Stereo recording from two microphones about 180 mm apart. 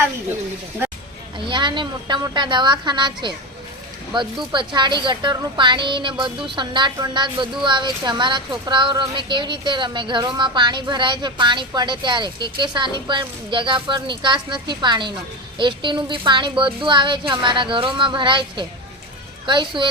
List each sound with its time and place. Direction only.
1.5 s speech: 25° right (ahead or behind)